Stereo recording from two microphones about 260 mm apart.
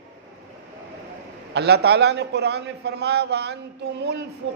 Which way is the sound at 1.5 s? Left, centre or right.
Right.